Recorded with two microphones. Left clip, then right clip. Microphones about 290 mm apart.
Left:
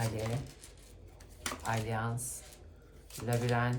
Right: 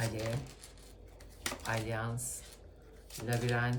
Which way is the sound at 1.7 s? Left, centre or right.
Centre.